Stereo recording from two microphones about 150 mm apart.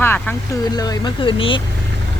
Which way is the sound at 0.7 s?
25° left (ahead or behind).